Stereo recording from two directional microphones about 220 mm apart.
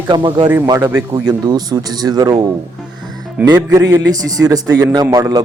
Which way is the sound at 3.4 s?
15° right (ahead or behind).